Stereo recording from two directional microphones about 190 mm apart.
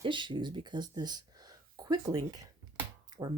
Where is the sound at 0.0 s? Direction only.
25° right (ahead or behind).